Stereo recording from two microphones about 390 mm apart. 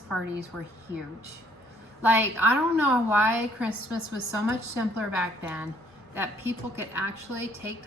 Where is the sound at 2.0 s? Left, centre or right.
Centre.